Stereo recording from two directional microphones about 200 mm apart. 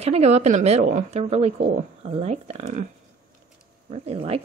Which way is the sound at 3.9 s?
30° right (ahead or behind).